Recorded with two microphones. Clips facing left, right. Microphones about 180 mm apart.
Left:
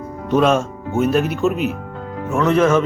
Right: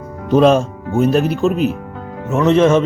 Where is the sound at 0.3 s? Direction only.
35° right (ahead or behind).